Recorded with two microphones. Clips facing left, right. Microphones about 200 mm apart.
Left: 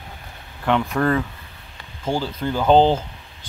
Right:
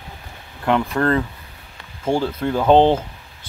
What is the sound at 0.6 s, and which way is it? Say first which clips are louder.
Speech: right 1 dB; 5° right (ahead or behind).